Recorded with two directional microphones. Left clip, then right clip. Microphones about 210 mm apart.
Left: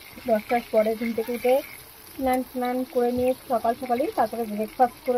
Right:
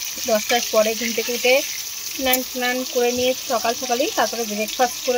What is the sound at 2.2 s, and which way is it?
Speech, 30° right (ahead or behind).